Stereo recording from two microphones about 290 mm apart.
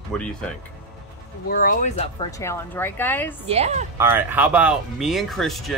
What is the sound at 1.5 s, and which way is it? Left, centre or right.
Speech, left.